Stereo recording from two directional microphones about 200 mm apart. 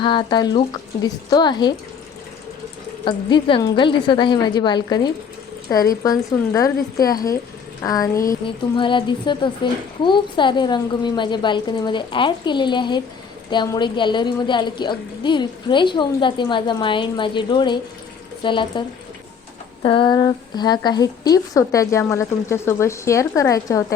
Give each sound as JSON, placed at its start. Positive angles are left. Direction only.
{"t": 0.0, "sound": "a woman's voice", "side_deg": 25}
{"t": 3.0, "sound": "a woman's voice", "side_deg": 25}